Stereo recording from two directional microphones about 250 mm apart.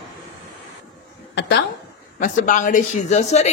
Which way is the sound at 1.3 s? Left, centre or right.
Left.